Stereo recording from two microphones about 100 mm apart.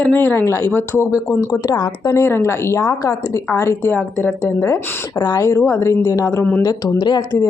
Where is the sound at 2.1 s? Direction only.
30° left (ahead or behind).